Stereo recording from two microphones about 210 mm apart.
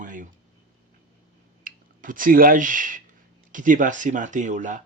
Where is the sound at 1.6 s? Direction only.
40° right (ahead or behind).